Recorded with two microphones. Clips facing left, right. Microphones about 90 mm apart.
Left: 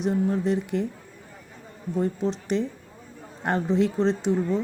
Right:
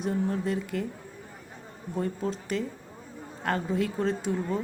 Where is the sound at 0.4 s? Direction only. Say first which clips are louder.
Left 5 dB; 20° left (ahead or behind).